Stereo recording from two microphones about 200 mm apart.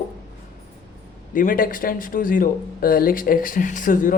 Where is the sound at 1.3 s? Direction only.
45° left (ahead or behind).